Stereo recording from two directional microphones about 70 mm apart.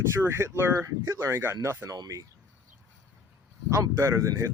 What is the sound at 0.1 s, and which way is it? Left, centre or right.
Speech, right.